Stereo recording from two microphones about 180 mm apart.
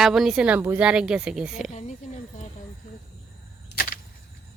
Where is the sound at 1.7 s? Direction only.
40° left (ahead or behind).